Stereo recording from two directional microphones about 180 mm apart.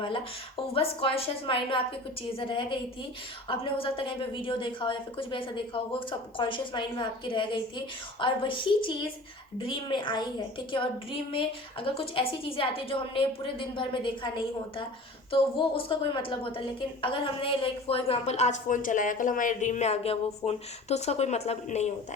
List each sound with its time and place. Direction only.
0.1 s a woman's voice: 30° left (ahead or behind)